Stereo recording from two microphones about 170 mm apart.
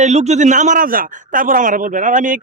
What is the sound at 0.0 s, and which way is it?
A man's voice, 40° right (ahead or behind).